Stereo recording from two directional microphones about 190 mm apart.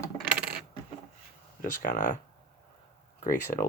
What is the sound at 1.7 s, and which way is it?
Speech, 45° left (ahead or behind).